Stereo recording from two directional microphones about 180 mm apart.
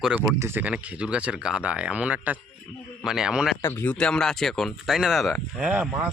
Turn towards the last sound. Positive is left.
turn(degrees=-10)  # may be behind; listen again after turning